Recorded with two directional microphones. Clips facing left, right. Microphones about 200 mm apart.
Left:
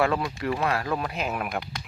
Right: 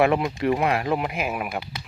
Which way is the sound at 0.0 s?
20° right (ahead or behind).